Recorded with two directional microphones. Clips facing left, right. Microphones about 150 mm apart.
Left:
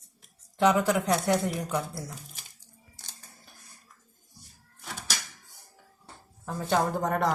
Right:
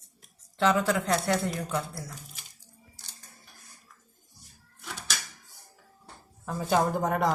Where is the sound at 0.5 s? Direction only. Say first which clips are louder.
Left 2 dB; 15° left (ahead or behind).